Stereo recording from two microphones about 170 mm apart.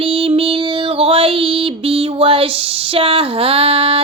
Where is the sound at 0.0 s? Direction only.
35° right (ahead or behind).